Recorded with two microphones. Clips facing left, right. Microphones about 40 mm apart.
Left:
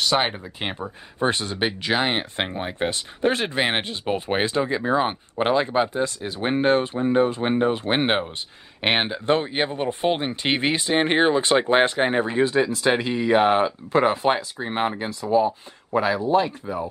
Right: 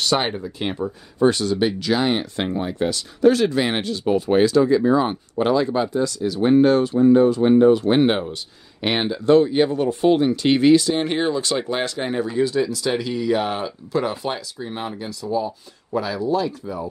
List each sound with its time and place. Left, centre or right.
0.0 s speech: centre
0.4 s speech: left